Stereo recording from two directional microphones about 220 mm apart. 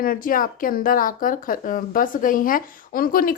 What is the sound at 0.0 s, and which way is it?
Speech, 40° left (ahead or behind).